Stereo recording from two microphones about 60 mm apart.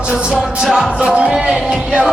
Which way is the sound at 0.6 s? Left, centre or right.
Centre.